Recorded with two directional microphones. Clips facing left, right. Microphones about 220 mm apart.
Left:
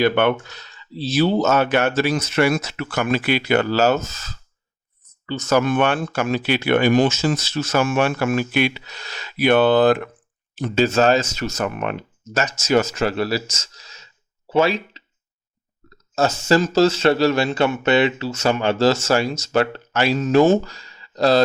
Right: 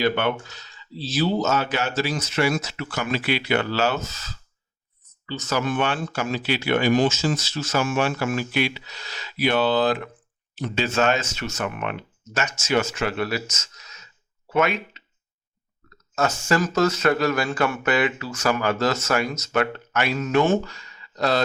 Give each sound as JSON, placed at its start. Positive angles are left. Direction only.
{"t": 0.0, "sound": "speech", "side_deg": 60}
{"t": 16.1, "sound": "speech", "side_deg": 30}